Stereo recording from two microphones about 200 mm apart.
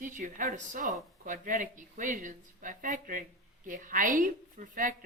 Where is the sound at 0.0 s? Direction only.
40° right (ahead or behind).